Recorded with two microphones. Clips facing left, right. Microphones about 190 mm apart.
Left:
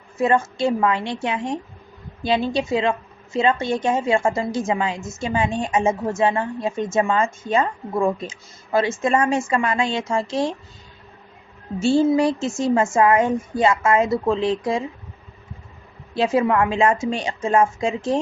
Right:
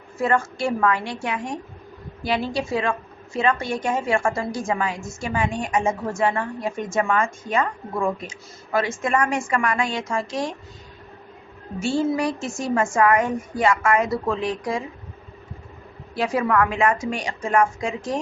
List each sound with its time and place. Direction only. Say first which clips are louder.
0.2 s a woman's voice: left 3 dB; 20° left (ahead or behind)
11.8 s a woman's voice: left 5 dB; 25° left (ahead or behind)
16.1 s a woman's voice: left 3 dB; 25° left (ahead or behind)